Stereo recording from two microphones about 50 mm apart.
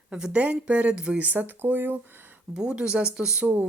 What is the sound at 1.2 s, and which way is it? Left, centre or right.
Speech, right.